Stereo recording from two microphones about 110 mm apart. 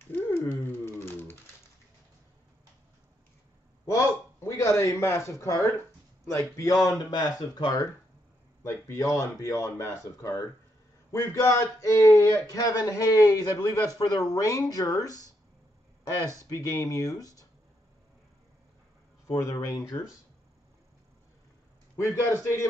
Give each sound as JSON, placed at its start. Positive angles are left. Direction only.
{"t": 0.0, "sound": "a sound", "side_deg": 20}
{"t": 3.8, "sound": "a man's voice", "side_deg": 30}
{"t": 19.2, "sound": "speech", "side_deg": 30}
{"t": 21.9, "sound": "speech", "side_deg": 25}